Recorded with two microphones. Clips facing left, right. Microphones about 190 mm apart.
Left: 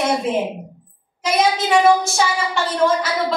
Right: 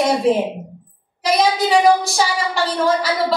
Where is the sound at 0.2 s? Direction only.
35° right (ahead or behind).